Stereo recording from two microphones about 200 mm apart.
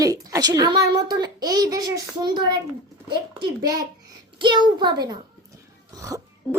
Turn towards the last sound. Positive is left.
turn(degrees=-15)  # may be behind; listen again after turning